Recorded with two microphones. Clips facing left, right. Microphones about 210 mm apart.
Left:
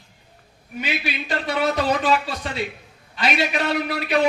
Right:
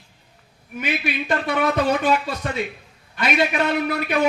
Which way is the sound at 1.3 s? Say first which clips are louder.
Right 1 dB; 55° right (ahead or behind).